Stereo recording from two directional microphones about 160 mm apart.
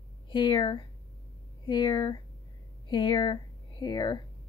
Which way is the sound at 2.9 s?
30° left (ahead or behind).